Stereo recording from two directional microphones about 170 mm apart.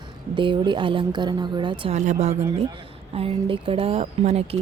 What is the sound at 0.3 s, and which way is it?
Speech, 30° right (ahead or behind).